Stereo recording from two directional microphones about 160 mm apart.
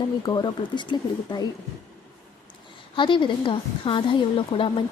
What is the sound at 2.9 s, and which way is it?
A woman's voice, 30° left (ahead or behind).